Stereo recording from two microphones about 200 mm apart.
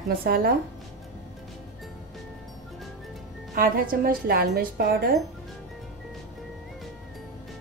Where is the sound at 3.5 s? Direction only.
45° right (ahead or behind).